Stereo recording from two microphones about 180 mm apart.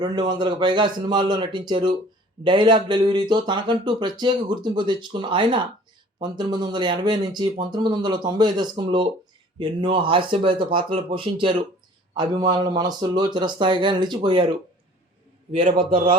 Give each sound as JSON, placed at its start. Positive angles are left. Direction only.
{"t": 0.0, "sound": "speech", "side_deg": -25}